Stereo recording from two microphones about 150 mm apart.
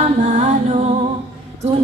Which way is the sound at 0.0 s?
45° right (ahead or behind).